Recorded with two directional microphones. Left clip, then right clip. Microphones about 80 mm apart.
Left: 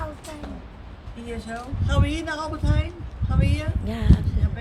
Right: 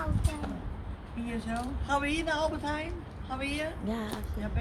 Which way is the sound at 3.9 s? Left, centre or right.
Left.